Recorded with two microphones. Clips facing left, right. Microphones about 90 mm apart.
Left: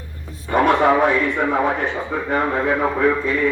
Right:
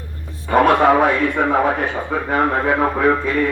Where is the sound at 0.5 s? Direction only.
65° right (ahead or behind).